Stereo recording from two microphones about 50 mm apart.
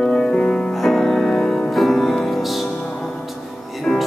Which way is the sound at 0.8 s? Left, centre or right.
Centre.